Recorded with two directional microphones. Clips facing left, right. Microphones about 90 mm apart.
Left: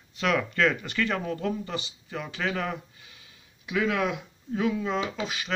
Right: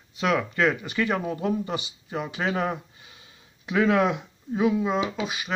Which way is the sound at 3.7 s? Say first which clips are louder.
Right 5 dB; 35° right (ahead or behind).